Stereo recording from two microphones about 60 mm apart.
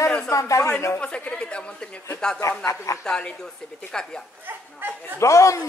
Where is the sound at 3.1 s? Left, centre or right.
Centre.